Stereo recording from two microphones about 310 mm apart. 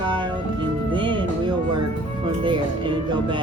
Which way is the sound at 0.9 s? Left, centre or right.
Centre.